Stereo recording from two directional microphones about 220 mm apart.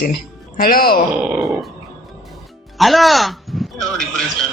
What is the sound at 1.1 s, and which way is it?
Speech, 5° right (ahead or behind).